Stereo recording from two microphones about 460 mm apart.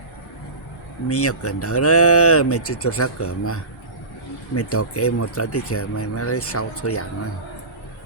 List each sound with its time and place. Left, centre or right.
1.0 s speech: left